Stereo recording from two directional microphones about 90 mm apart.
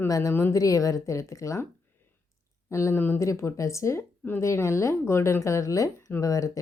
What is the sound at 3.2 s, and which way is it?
A woman's voice, 30° left (ahead or behind).